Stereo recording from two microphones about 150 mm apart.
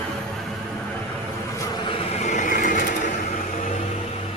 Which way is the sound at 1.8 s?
40° left (ahead or behind).